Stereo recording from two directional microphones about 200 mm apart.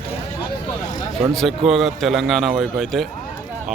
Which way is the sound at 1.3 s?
Centre (ahead or behind).